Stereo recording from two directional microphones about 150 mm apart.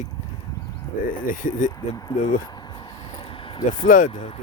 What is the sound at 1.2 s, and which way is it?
Speech, 60° left (ahead or behind).